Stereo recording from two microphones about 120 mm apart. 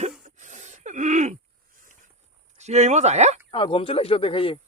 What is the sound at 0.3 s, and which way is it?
Gasp, 90° right.